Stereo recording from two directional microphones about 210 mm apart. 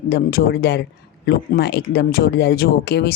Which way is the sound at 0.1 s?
45° left (ahead or behind).